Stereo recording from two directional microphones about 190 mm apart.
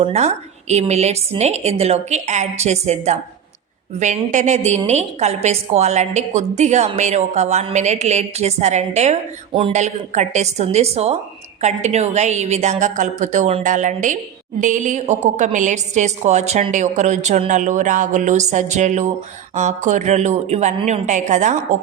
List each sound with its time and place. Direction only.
0.0 s a woman's voice: 35° right (ahead or behind)